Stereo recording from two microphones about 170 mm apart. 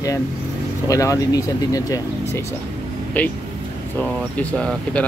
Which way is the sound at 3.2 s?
10° left (ahead or behind).